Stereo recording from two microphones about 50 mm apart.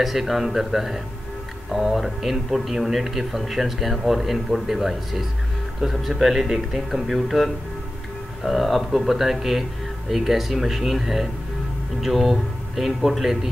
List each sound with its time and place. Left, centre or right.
0.0 s speech: centre